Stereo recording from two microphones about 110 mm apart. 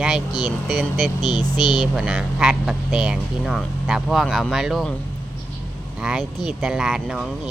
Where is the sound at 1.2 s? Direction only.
40° left (ahead or behind).